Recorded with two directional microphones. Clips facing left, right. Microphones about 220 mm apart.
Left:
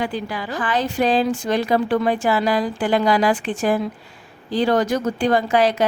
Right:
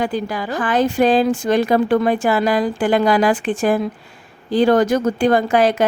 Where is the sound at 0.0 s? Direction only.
45° right (ahead or behind).